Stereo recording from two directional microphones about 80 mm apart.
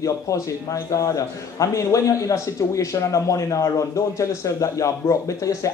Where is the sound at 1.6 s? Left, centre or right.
Left.